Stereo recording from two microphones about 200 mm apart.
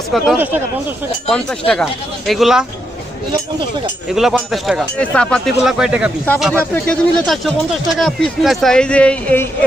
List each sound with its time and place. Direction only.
0.1 s speech: 5° right (ahead or behind)
1.3 s speech: 5° left (ahead or behind)
4.1 s speech: centre (ahead or behind)
6.2 s speech: 10° left (ahead or behind)